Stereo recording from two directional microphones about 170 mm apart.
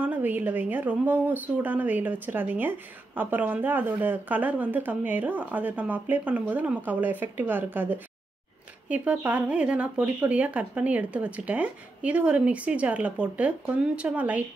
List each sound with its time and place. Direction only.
0.0 s speech: 10° right (ahead or behind)